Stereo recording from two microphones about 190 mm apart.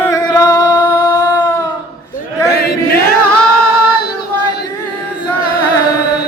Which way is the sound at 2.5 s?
60° left (ahead or behind).